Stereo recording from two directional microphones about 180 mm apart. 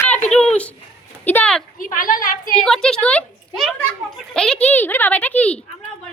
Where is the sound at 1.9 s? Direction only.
50° left (ahead or behind).